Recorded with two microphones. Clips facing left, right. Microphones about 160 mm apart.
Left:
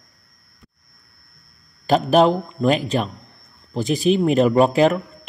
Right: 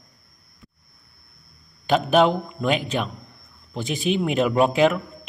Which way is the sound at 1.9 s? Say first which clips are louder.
Left 3 dB; centre (ahead or behind).